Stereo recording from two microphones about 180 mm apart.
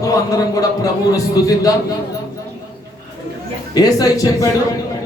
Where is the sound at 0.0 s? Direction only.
20° left (ahead or behind).